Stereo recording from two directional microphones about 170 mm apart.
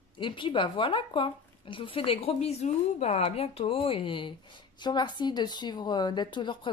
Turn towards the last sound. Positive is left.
turn(degrees=30)  # may be behind; listen again after turning